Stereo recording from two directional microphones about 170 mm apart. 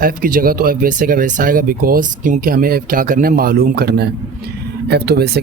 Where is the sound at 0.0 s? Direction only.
55° right (ahead or behind).